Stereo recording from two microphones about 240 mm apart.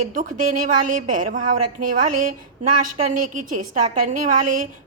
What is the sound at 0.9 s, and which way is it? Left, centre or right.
A woman's voice, right.